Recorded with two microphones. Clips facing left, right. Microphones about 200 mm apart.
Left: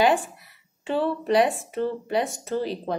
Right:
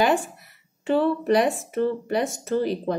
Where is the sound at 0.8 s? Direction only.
50° right (ahead or behind).